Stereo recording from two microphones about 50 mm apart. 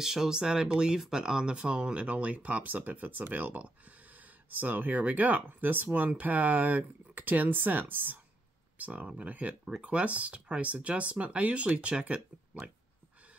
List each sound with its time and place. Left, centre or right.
0.0 s speech: centre; by 8.2 s right
8.7 s speech: right